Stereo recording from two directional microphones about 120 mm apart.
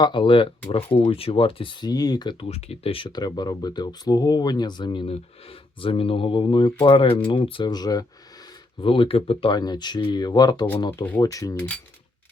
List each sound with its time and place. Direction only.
0.0 s speech: 40° left (ahead or behind)
2.5 s speech: 60° left (ahead or behind); by 5.0 s 40° left (ahead or behind)
5.0 s speech: 50° left (ahead or behind); by 8.0 s 35° left (ahead or behind)
8.8 s speech: 45° left (ahead or behind)
9.6 s speech: 35° left (ahead or behind)
11.2 s speech: 30° left (ahead or behind)